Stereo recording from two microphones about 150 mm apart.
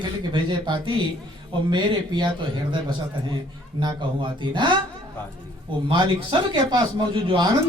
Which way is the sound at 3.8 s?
30° right (ahead or behind).